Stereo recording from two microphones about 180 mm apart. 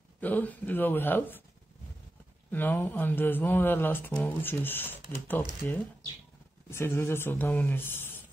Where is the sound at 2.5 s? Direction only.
10° left (ahead or behind).